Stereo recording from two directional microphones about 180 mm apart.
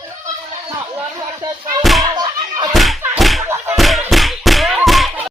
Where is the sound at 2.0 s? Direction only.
25° right (ahead or behind).